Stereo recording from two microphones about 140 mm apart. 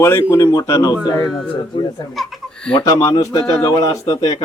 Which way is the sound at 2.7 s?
30° left (ahead or behind).